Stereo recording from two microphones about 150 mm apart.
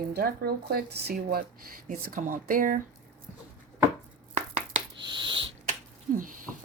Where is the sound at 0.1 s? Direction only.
90° right; by 2.8 s 65° right (ahead or behind).